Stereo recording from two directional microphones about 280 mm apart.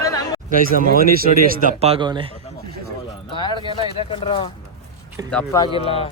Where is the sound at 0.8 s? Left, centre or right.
Right.